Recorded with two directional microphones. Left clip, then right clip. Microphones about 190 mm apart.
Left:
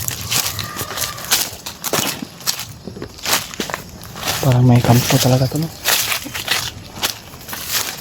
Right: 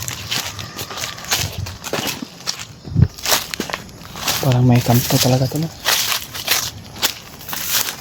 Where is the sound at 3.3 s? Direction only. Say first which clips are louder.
Even; 20° right (ahead or behind).